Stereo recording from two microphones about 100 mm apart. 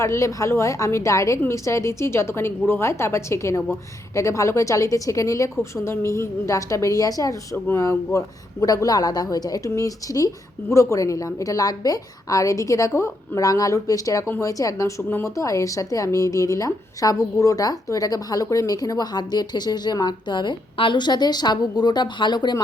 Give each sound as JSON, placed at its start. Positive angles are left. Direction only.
{"t": 0.0, "sound": "a woman's voice", "side_deg": 30}